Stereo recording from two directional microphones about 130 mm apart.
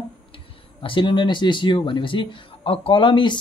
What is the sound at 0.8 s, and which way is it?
Speech, 40° left (ahead or behind).